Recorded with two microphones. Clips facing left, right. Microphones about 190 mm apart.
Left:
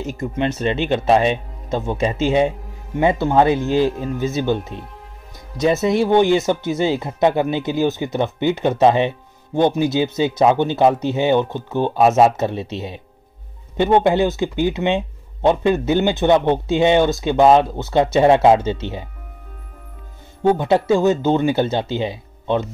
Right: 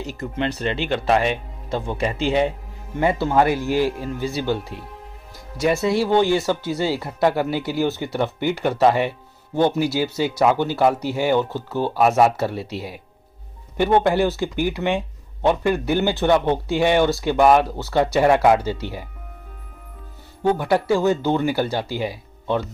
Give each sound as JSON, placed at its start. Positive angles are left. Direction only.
{"t": 0.0, "sound": "speech", "side_deg": 20}
{"t": 20.4, "sound": "speech", "side_deg": 20}